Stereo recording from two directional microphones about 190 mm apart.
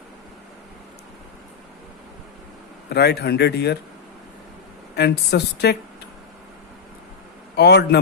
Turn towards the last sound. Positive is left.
turn(degrees=60)  # may be behind; listen again after turning